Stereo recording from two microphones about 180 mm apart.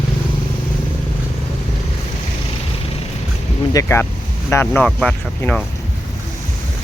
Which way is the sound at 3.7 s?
15° left (ahead or behind).